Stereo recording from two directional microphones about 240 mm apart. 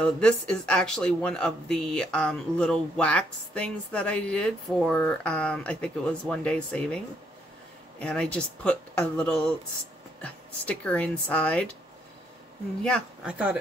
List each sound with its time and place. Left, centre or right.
0.0 s speech: centre
8.0 s speech: centre
12.8 s speech: centre